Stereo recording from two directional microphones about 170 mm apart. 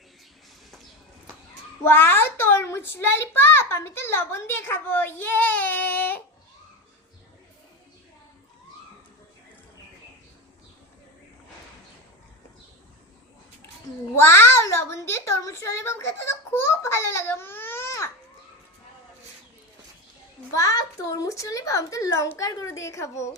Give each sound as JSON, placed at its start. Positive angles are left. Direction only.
{"t": 1.8, "sound": "a child's voice", "side_deg": 15}
{"t": 14.2, "sound": "a sound", "side_deg": 15}
{"t": 20.6, "sound": "a child's voice", "side_deg": 20}